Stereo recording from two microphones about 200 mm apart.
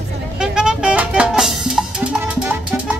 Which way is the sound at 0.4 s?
5° right (ahead or behind).